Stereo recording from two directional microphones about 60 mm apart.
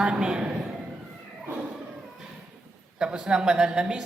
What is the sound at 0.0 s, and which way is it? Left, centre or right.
Speech, centre.